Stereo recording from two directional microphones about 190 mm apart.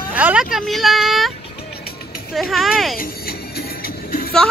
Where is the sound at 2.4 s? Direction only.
Centre (ahead or behind).